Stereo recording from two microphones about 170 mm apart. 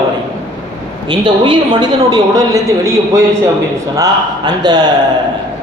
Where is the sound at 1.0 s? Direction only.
25° right (ahead or behind).